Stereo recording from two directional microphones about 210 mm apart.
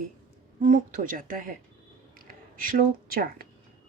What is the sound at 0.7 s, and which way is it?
Speech, 40° right (ahead or behind).